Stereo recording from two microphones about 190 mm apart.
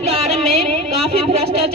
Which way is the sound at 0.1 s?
30° right (ahead or behind).